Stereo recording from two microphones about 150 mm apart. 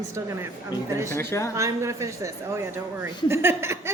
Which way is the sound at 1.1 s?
20° left (ahead or behind).